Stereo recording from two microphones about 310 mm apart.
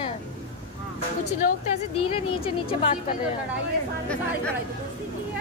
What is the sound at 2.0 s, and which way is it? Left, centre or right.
A woman's voice, centre.